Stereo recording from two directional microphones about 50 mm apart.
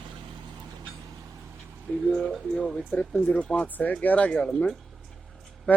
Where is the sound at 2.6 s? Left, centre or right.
Left.